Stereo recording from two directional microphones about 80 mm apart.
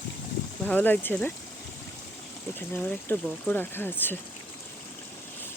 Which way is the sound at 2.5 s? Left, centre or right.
Left.